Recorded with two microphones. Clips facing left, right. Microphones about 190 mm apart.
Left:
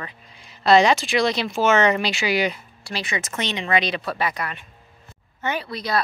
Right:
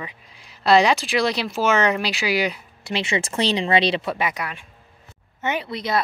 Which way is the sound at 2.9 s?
25° right (ahead or behind).